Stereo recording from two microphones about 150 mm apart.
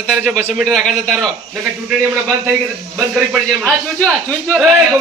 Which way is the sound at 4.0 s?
10° left (ahead or behind).